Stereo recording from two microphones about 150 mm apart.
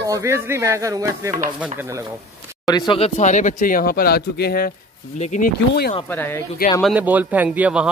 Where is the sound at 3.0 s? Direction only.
50° left (ahead or behind); by 4.7 s 90° left.